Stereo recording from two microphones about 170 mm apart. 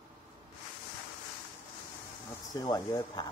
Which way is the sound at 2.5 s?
20° left (ahead or behind).